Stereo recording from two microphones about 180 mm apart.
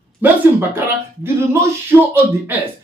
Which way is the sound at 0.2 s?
10° right (ahead or behind).